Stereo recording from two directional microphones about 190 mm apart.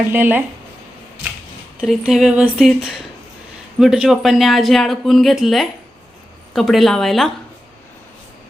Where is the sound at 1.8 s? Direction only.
Centre (ahead or behind).